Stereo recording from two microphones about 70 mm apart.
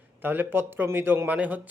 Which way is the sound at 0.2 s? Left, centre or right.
Right.